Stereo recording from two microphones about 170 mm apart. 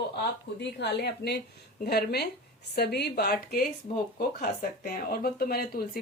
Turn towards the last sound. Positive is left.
turn(degrees=65)  # may be behind; listen again after turning